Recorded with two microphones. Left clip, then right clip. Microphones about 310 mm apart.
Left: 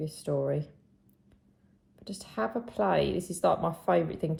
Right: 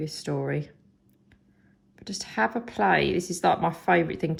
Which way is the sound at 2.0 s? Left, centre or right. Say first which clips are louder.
Right 7 dB; right.